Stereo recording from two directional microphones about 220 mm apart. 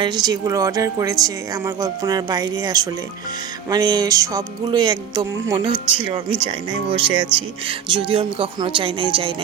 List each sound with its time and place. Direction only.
0.0 s speech: 20° right (ahead or behind)